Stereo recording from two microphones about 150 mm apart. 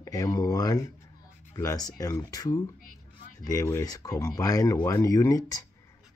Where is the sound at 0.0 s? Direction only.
20° left (ahead or behind).